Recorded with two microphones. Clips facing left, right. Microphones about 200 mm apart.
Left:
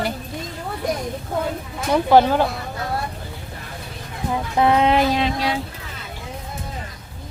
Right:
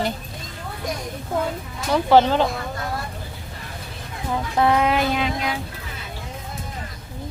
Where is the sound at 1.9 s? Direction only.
10° left (ahead or behind).